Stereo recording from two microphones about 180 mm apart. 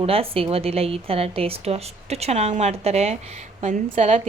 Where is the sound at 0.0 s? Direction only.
30° right (ahead or behind).